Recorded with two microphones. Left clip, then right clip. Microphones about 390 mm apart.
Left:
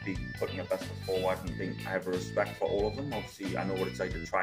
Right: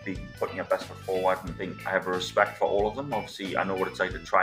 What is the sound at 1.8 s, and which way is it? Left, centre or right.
Speech, left.